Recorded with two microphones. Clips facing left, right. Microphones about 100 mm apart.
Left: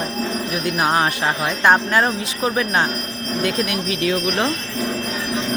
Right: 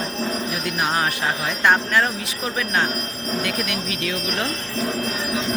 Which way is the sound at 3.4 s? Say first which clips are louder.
Left 8 dB; 30° left (ahead or behind).